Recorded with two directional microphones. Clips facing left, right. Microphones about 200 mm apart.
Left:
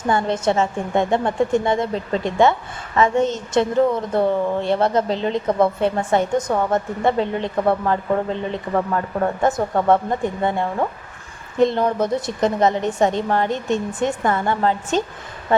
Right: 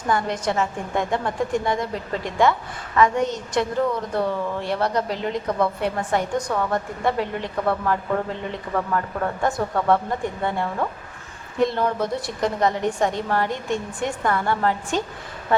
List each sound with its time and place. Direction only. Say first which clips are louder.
0.1 s a woman's voice: left 4 dB; 25° left (ahead or behind)
8.7 s speech: left 4 dB; 35° left (ahead or behind)
9.4 s a woman's voice: left 3 dB; 20° left (ahead or behind)